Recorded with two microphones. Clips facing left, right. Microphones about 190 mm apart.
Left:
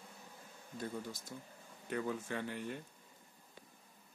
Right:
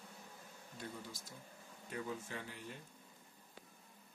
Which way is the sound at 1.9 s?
65° left (ahead or behind).